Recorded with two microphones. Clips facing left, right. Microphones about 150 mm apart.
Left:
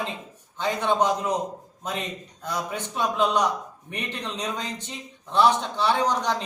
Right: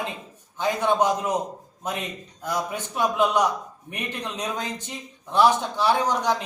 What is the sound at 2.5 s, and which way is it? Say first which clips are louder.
A man's voice: right 2 dB; 10° right (ahead or behind).